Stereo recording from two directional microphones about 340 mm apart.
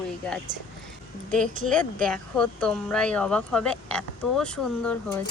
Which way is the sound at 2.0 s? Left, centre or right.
Centre.